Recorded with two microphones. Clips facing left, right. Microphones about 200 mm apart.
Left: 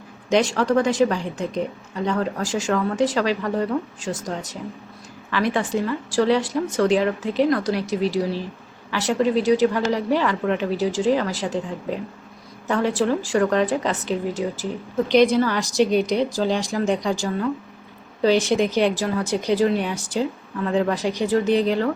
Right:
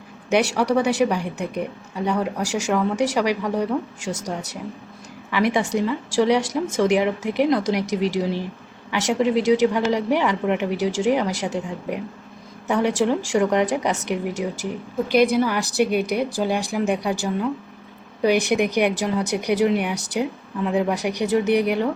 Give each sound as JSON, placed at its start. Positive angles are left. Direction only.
{"t": 0.3, "sound": "speech", "side_deg": -10}
{"t": 5.3, "sound": "speech", "side_deg": -15}
{"t": 6.4, "sound": "speech", "side_deg": -85}
{"t": 6.8, "sound": "speech", "side_deg": -15}